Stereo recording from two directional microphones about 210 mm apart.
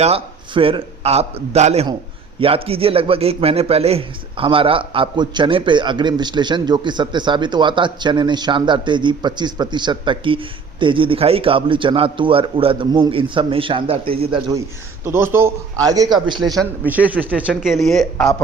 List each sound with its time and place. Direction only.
0.0 s a man's voice: 25° right (ahead or behind)
15.0 s a man's voice: 10° right (ahead or behind)
16.6 s a man's voice: 5° right (ahead or behind)